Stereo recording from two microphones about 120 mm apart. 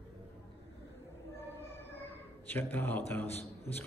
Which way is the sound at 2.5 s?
15° left (ahead or behind).